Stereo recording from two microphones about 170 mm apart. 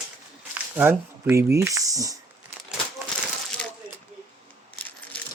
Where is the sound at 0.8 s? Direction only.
15° right (ahead or behind).